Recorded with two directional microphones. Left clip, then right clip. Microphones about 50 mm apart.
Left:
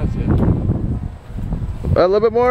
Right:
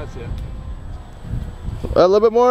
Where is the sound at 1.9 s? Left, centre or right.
Right.